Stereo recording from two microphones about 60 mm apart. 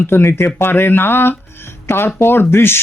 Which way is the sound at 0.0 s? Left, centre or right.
Left.